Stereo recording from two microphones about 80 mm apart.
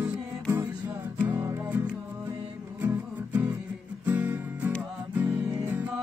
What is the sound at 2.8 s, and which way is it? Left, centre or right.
Music, right.